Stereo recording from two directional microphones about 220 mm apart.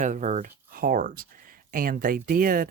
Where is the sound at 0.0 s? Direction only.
35° right (ahead or behind).